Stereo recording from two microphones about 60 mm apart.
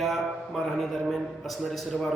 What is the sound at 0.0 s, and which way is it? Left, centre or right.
A man's voice, centre.